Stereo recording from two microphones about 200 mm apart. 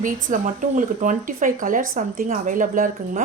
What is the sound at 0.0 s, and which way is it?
A woman's voice, 40° right (ahead or behind).